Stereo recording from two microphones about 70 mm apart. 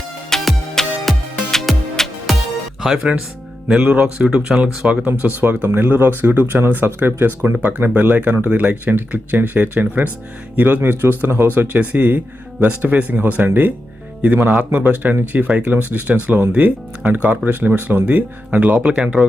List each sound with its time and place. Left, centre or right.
0.3 s music: centre
3.7 s speech: centre
5.6 s speech: right